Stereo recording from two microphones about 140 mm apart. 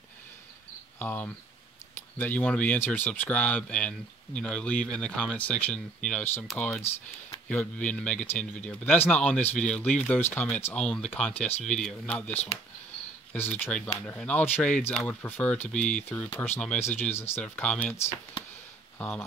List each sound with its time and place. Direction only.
0.9 s speech: 15° left (ahead or behind)
6.8 s speech: 15° left (ahead or behind)
18.9 s speech: 10° left (ahead or behind)